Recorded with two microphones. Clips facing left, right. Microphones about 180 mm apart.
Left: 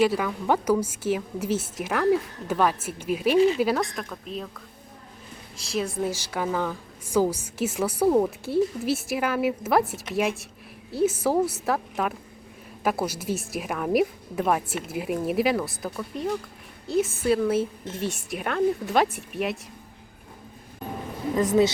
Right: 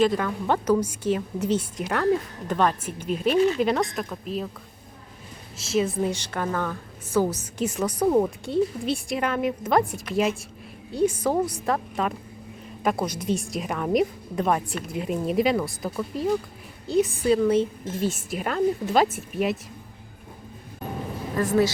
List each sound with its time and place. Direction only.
0.0 s a woman's voice: 5° left (ahead or behind)
5.6 s a woman's voice: centre (ahead or behind)
21.3 s speech: 20° left (ahead or behind)